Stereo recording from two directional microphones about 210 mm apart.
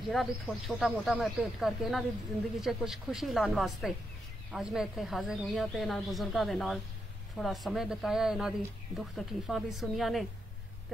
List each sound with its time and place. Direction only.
0.0 s speech: centre (ahead or behind)